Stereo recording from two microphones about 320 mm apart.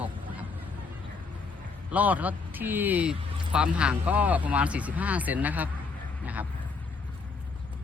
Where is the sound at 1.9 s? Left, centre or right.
Centre.